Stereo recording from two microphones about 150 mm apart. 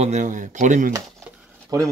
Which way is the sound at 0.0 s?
55° right (ahead or behind).